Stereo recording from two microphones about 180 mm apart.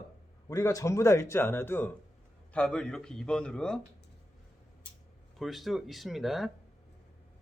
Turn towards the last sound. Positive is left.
turn(degrees=0)  # may be behind; listen again after turning